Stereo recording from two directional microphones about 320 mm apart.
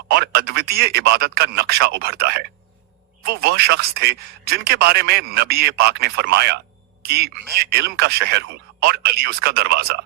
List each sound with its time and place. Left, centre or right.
0.1 s speech: right